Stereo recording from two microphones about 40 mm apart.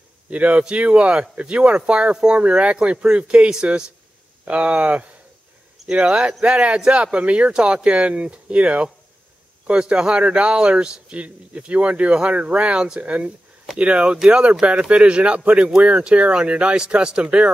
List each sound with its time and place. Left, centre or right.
0.3 s speech: right
4.5 s speech: right
5.9 s speech: right
9.8 s speech: right